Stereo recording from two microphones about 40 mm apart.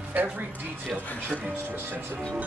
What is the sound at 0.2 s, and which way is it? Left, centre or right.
Speech, right.